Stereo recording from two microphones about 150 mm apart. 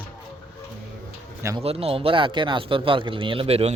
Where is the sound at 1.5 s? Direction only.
40° right (ahead or behind).